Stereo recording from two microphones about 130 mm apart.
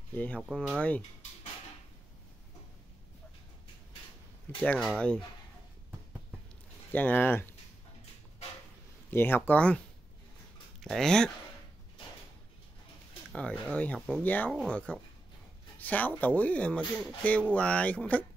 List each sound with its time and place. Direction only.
0.1 s speech: 10° left (ahead or behind)
4.6 s speech: 10° left (ahead or behind)
6.9 s speech: 15° left (ahead or behind)
9.1 s speech: 15° left (ahead or behind)
10.8 s speech: 5° left (ahead or behind)
13.3 s speech: 10° left (ahead or behind)